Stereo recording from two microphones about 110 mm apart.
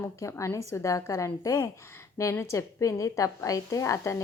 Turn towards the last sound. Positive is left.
turn(degrees=30)  # may be behind; listen again after turning